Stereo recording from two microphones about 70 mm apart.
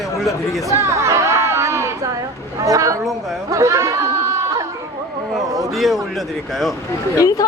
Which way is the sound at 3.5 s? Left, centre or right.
Right.